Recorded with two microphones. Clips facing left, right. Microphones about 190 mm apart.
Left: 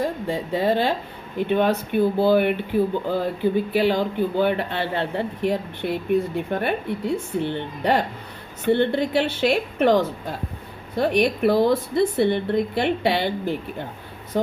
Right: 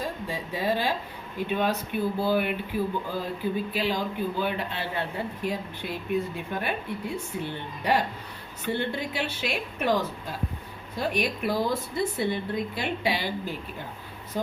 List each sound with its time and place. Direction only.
0.0 s speech: 60° left (ahead or behind)
8.6 s speech: 60° left (ahead or behind)